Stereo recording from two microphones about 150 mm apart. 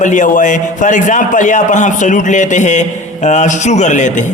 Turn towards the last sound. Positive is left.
turn(degrees=55)  # may be behind; listen again after turning